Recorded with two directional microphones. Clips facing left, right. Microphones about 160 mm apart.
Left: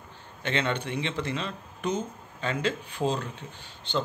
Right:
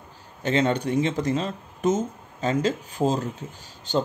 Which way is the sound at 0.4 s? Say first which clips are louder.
Right 6 dB; 40° right (ahead or behind).